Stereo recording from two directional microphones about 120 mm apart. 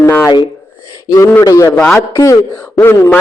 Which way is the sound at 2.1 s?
35° left (ahead or behind).